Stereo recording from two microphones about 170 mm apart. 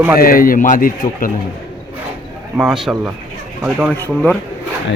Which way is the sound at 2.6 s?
Centre (ahead or behind).